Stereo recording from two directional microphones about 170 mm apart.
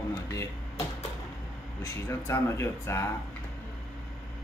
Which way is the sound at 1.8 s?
15° left (ahead or behind).